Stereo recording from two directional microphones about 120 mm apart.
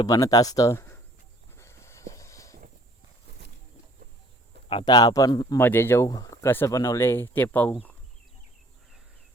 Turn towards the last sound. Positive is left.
turn(degrees=15)  # may be behind; listen again after turning